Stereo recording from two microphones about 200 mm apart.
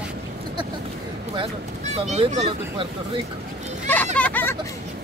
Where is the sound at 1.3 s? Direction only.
30° right (ahead or behind).